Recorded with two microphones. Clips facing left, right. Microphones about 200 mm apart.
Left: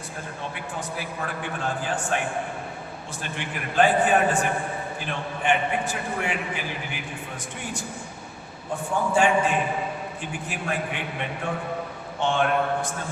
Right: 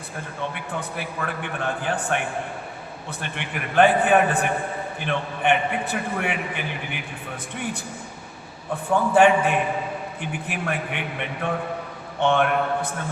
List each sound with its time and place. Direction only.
0.5 s a man's voice: 60° right (ahead or behind)
8.7 s a man's voice: 60° right (ahead or behind)